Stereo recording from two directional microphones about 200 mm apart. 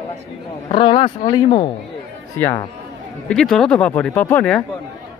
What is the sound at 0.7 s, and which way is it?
Speech, 25° left (ahead or behind).